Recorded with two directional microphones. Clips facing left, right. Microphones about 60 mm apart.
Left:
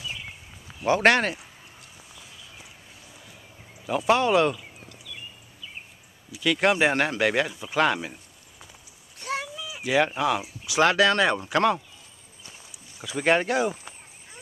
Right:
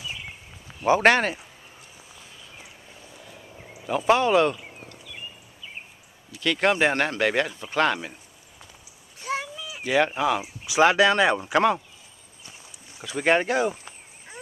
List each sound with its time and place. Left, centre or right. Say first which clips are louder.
0.0 s a sound: even; centre
0.7 s speech: right 1 dB; centre
2.1 s a sound: right 1 dB; centre
3.7 s speech: right 1 dB; centre
5.0 s a sound: even; centre
6.3 s speech: even; centre
9.2 s cat: right 1 dB; centre
10.6 s speech: right 2 dB; centre
13.1 s speech: right 1 dB; centre